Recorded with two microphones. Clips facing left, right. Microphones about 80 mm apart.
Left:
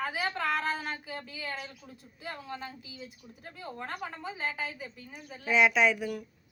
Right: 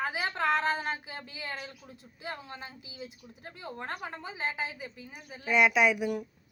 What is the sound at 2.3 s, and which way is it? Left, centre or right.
A woman's voice, right.